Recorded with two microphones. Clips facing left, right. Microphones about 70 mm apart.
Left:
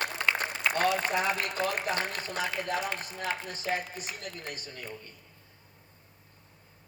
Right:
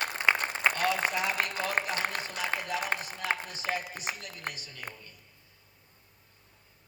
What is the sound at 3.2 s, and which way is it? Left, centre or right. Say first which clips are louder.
Speech: right 2 dB; right.